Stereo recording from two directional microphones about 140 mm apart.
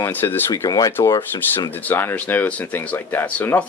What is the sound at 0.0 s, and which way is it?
Speech, 15° left (ahead or behind).